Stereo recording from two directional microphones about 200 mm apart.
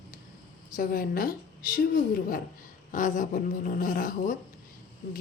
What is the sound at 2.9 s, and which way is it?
Speech, 40° left (ahead or behind).